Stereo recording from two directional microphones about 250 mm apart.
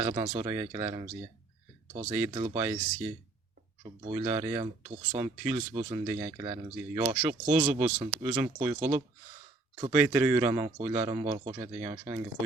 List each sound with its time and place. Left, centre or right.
0.0 s a man's voice: centre
3.8 s a man's voice: centre
7.6 s speech: right
9.9 s a man's voice: centre